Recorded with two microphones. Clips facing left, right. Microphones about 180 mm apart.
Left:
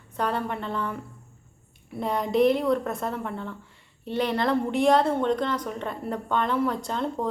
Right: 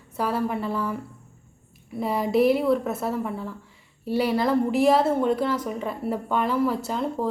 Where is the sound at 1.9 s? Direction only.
5° right (ahead or behind).